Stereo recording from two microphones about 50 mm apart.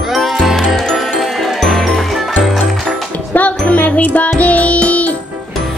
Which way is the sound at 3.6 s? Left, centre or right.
Left.